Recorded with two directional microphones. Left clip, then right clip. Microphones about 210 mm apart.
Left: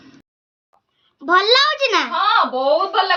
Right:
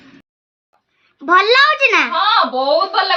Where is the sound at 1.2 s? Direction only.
15° right (ahead or behind).